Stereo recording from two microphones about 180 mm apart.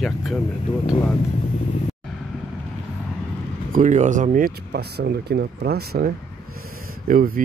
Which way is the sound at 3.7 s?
45° right (ahead or behind).